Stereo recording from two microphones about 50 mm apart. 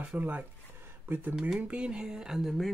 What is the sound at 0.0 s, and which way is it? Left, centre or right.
Speech, right.